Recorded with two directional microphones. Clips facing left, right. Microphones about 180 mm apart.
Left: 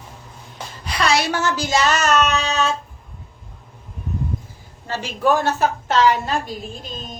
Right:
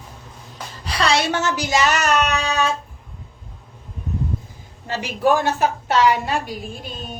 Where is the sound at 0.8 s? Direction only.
30° right (ahead or behind); by 2.7 s 10° right (ahead or behind).